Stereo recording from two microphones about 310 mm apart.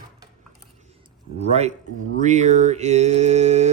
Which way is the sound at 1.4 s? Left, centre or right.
Right.